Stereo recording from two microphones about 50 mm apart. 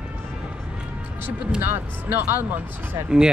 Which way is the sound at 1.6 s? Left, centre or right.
Right.